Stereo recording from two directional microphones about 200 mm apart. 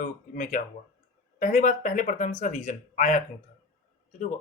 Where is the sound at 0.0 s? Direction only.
40° left (ahead or behind).